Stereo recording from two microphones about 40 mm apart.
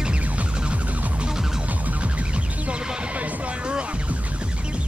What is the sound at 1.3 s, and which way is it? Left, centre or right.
Music, centre.